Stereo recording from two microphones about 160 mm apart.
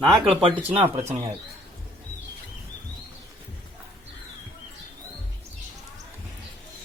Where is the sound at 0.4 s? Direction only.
35° right (ahead or behind).